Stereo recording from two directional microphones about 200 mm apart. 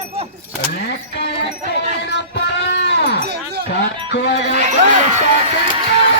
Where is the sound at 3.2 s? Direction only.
55° right (ahead or behind).